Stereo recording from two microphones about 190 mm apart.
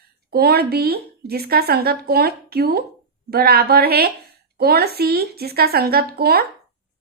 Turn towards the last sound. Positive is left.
turn(degrees=-55)  # may be behind; listen again after turning